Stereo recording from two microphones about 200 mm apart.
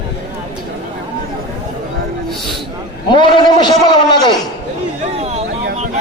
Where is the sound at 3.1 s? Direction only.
20° left (ahead or behind).